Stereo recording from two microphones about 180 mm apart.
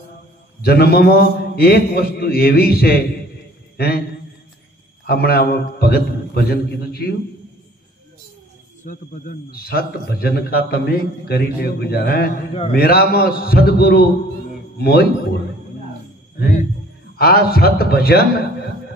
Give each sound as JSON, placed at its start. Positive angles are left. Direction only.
{"t": 0.6, "sound": "a man's voice", "side_deg": 60}
{"t": 5.0, "sound": "a man's voice", "side_deg": 60}
{"t": 8.8, "sound": "a man's voice", "side_deg": 45}
{"t": 16.3, "sound": "a man's voice", "side_deg": 55}